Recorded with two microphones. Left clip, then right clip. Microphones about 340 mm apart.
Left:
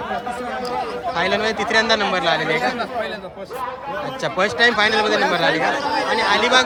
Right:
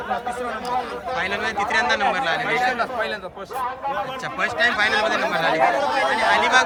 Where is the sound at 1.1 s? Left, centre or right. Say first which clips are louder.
Left 3 dB; centre.